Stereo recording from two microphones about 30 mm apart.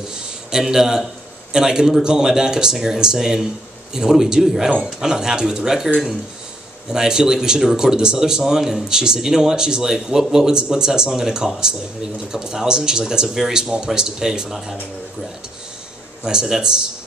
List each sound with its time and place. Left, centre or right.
0.1 s a sound: centre
1.5 s speech: centre
6.9 s speech: centre
16.4 s speech: centre